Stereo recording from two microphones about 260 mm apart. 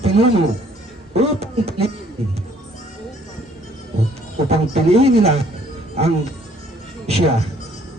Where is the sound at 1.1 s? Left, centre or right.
Right.